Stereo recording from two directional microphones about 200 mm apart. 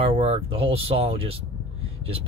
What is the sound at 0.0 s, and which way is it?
Speech, 30° right (ahead or behind).